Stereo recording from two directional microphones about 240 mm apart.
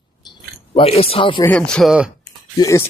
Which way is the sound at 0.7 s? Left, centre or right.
Left.